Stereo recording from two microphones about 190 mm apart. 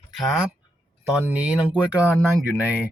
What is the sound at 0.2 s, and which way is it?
Speech, centre (ahead or behind).